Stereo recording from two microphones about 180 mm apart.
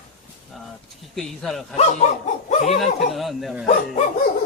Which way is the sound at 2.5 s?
40° left (ahead or behind).